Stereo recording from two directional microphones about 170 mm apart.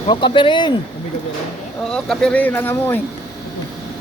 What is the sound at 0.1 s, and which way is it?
Speech, 30° left (ahead or behind).